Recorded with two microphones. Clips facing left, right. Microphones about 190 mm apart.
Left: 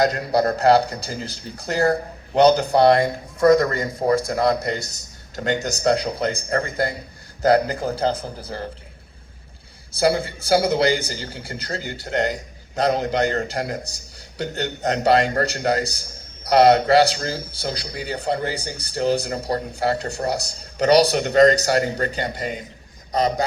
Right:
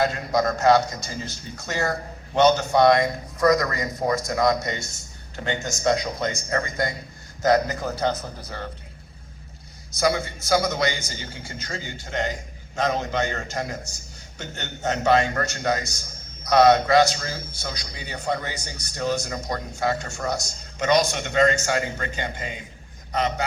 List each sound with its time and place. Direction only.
0.3 s a man's voice: 35° left (ahead or behind)
9.9 s a man's voice: 35° left (ahead or behind)